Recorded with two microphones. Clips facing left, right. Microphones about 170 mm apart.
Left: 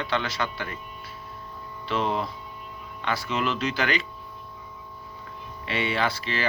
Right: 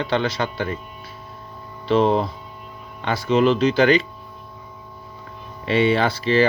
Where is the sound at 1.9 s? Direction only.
30° right (ahead or behind).